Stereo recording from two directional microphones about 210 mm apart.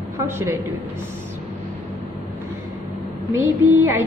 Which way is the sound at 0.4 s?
10° right (ahead or behind).